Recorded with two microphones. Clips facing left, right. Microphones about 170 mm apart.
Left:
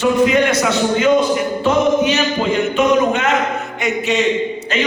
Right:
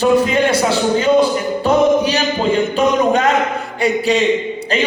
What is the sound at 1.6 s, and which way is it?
Music, 35° right (ahead or behind).